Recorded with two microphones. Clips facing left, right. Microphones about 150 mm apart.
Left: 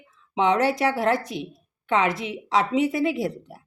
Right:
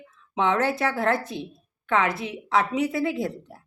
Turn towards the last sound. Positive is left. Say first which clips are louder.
# left 2 dB
turn(degrees=20)  # may be behind; listen again after turning